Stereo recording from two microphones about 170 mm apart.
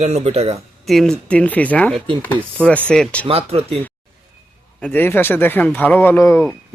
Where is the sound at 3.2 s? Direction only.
35° right (ahead or behind).